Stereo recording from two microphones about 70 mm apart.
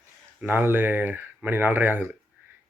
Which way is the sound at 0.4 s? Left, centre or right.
Right.